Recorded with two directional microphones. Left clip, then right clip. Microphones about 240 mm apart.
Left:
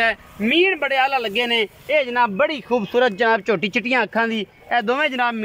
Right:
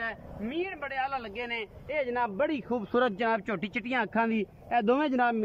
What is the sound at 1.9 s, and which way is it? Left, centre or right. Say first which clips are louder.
Speech: left 10 dB; centre.